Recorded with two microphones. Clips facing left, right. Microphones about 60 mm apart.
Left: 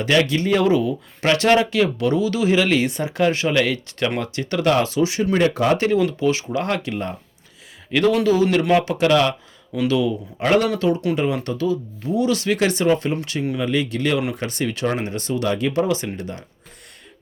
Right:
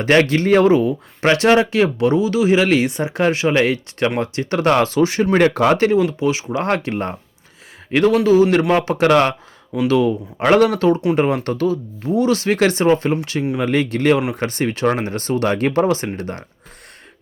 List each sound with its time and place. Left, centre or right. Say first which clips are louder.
0.0 s speech: right 4 dB; right
0.7 s speech: right 4 dB; right
4.6 s speech: right 3 dB; right
6.1 s speech: right 1 dB; centre
6.6 s speech: right 4 dB; right
7.9 s speech: right 3 dB; right
10.4 s speech: right 4 dB; right